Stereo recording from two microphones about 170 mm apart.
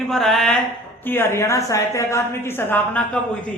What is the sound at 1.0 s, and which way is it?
A man's voice, 15° left (ahead or behind).